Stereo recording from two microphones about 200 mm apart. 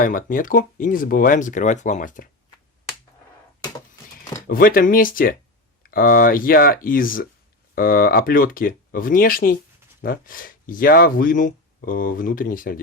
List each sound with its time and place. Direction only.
0.0 s speech: 45° left (ahead or behind)
4.4 s speech: 45° left (ahead or behind)